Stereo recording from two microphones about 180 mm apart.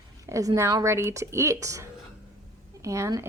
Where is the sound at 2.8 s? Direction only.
15° right (ahead or behind).